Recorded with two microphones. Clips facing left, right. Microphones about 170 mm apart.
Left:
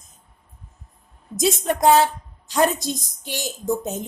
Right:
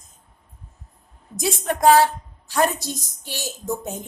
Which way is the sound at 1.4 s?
20° left (ahead or behind).